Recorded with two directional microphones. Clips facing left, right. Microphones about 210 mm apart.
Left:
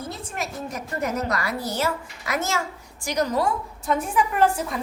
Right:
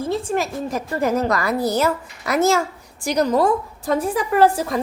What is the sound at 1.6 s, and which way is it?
A woman's voice, 40° right (ahead or behind).